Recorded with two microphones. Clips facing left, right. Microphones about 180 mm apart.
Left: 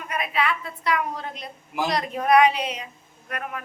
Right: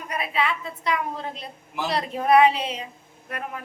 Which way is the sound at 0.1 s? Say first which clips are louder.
Even; 30° right (ahead or behind).